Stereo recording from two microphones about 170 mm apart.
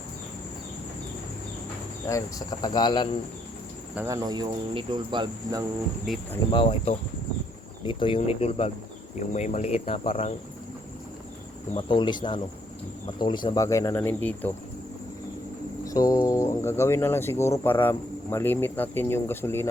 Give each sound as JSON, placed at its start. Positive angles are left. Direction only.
{"t": 2.0, "sound": "speech", "side_deg": 20}
{"t": 3.9, "sound": "cricket", "side_deg": -15}
{"t": 6.1, "sound": "speech", "side_deg": 0}
{"t": 6.5, "sound": "speech", "side_deg": 30}
{"t": 11.8, "sound": "speech", "side_deg": 25}
{"t": 15.8, "sound": "music", "side_deg": 20}
{"t": 16.2, "sound": "speech", "side_deg": 20}